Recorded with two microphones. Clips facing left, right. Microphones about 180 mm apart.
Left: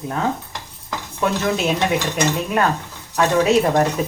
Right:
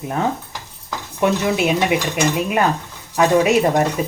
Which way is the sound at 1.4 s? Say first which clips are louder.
Right 2 dB; 15° right (ahead or behind).